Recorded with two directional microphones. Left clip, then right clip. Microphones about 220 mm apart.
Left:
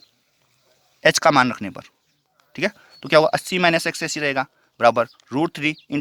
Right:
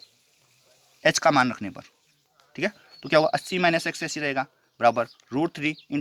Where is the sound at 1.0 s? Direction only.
40° left (ahead or behind).